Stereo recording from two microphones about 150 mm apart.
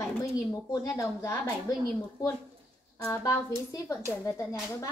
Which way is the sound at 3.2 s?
20° left (ahead or behind).